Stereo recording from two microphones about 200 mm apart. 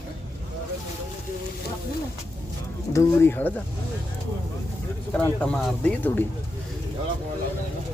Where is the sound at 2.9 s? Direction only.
10° left (ahead or behind).